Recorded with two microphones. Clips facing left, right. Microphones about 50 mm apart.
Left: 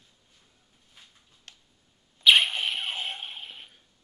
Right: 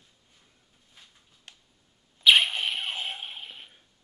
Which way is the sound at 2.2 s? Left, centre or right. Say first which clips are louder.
Even; centre.